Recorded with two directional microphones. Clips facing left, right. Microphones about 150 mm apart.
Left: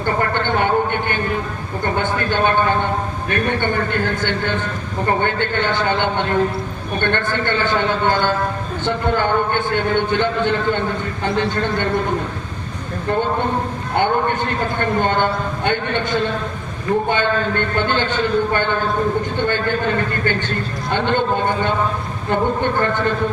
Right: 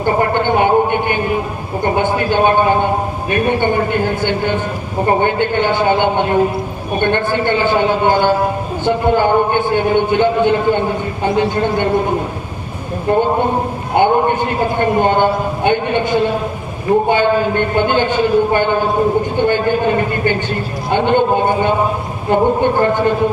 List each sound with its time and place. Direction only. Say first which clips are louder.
0.0 s a sound: right 5 dB; 20° right (ahead or behind)
1.8 s a man's voice: right 5 dB; 15° right (ahead or behind)
13.1 s a man's voice: right 5 dB; 40° right (ahead or behind)
14.3 s a man's voice: right 5 dB; 15° right (ahead or behind)